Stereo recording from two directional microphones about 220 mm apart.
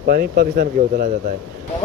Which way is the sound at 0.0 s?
45° right (ahead or behind).